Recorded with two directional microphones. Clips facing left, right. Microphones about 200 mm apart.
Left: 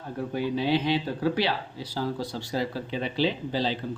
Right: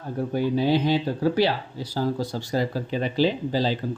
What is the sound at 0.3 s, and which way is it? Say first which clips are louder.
Speech: right 4 dB; 45° right (ahead or behind).